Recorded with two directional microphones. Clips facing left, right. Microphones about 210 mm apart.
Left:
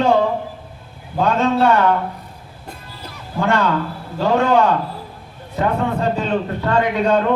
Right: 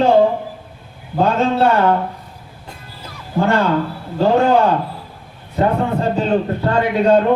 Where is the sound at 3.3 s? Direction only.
35° right (ahead or behind).